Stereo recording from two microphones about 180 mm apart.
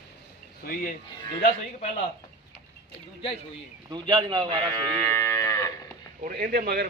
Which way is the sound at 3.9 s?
25° right (ahead or behind).